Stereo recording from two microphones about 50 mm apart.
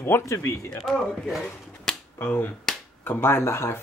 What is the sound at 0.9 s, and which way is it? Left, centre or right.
Speech, centre.